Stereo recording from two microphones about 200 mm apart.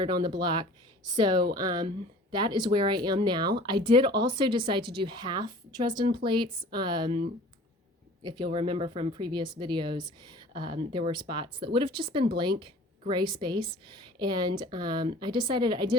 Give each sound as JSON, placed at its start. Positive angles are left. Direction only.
{"t": 0.0, "sound": "speech", "side_deg": -25}
{"t": 4.8, "sound": "a woman's voice", "side_deg": -50}
{"t": 5.0, "sound": "speech", "side_deg": -20}
{"t": 8.2, "sound": "speech", "side_deg": -20}